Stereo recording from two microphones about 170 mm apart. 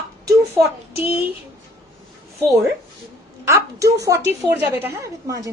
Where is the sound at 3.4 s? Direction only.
15° right (ahead or behind).